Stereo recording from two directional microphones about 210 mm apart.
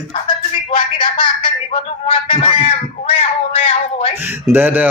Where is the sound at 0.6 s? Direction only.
25° left (ahead or behind).